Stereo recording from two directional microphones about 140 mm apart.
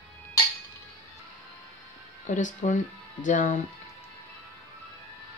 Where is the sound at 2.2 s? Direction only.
65° left (ahead or behind).